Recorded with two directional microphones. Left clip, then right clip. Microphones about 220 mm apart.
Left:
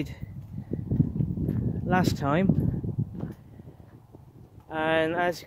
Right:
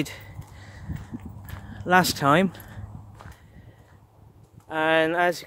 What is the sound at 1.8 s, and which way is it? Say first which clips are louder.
Speech: right 7 dB; 15° right (ahead or behind).